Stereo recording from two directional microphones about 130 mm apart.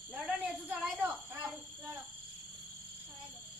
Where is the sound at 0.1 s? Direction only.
10° right (ahead or behind).